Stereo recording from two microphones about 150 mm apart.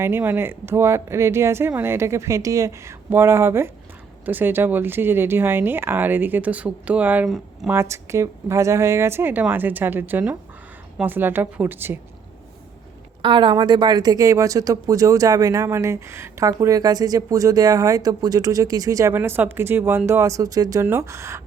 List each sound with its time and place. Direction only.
0.0 s speech: 15° right (ahead or behind)
13.2 s speech: 30° right (ahead or behind)